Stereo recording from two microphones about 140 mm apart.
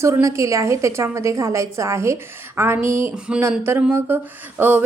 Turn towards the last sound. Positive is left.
turn(degrees=-15)  # may be behind; listen again after turning